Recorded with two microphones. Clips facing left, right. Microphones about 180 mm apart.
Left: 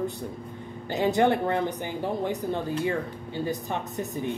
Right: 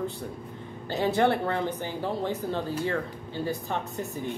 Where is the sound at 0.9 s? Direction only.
15° left (ahead or behind).